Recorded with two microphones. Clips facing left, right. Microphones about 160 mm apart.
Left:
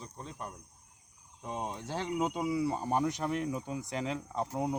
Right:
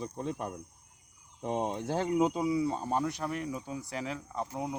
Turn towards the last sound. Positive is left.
turn(degrees=0)  # may be behind; listen again after turning